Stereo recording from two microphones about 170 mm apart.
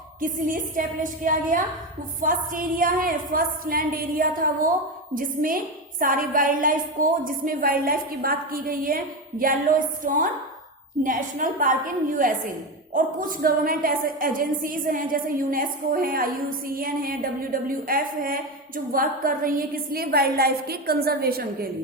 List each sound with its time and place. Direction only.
0.2 s a woman's voice: 55° right (ahead or behind)